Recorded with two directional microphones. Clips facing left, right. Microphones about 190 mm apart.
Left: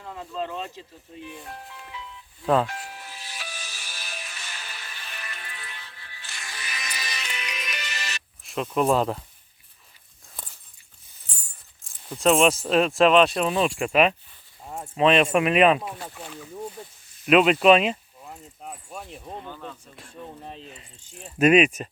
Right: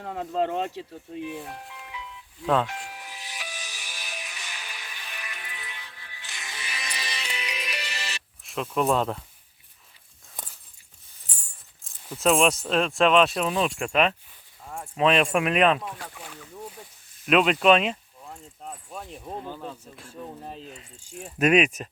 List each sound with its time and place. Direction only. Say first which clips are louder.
0.0 s speech: right 5 dB; 60° right (ahead or behind)
1.5 s music: even; 10° right (ahead or behind); by 8.2 s 30° right (ahead or behind)
8.4 s speech: left 2 dB; centre (ahead or behind)
12.1 s speech: left 2 dB; centre (ahead or behind)
14.6 s keys jangling: left 2 dB; 20° left (ahead or behind)
14.9 s speech: left 2 dB; centre (ahead or behind)
17.2 s speech: left 3 dB; 5° left (ahead or behind)